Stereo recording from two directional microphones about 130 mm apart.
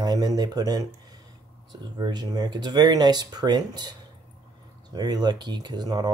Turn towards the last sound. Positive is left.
turn(degrees=-30)  # may be behind; listen again after turning